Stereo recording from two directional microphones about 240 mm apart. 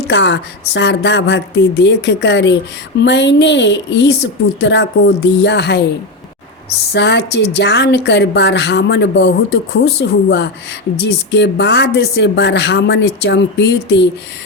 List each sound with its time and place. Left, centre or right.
0.1 s speech: left
6.9 s speech: left